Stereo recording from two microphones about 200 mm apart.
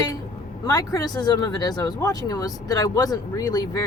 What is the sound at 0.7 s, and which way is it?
Speech, 20° left (ahead or behind).